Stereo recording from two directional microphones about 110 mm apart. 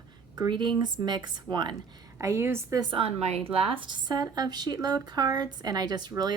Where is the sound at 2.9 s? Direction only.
60° right (ahead or behind).